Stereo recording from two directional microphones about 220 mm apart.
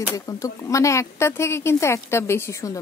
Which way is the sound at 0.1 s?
15° left (ahead or behind).